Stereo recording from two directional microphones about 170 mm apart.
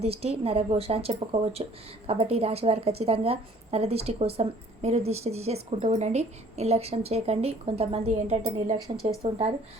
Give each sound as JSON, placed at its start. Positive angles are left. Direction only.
{"t": 0.0, "sound": "a woman's voice", "side_deg": -35}